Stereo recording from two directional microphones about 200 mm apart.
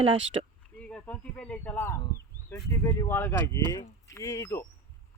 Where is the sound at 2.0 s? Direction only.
15° left (ahead or behind).